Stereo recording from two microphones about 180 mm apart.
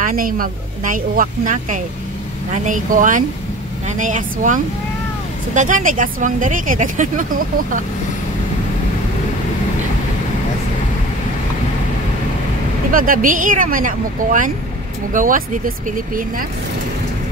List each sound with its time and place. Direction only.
0.0 s speech: 50° right (ahead or behind)
12.9 s speech: 50° right (ahead or behind)